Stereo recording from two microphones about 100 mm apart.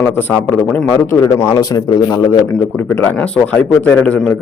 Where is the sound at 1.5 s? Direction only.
40° left (ahead or behind).